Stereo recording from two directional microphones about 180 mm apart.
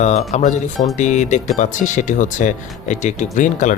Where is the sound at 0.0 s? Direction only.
40° left (ahead or behind).